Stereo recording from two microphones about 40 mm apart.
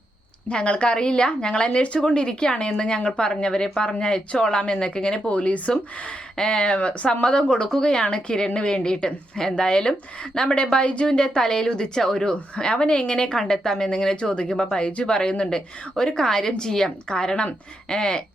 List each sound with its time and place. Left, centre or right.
0.4 s a woman's voice: left
5.3 s speech: left
6.3 s a woman's voice: centre